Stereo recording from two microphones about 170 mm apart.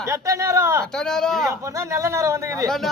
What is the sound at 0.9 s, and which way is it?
Speech, 5° left (ahead or behind).